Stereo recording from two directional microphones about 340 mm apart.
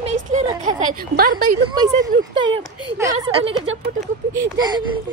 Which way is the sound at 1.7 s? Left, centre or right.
Centre.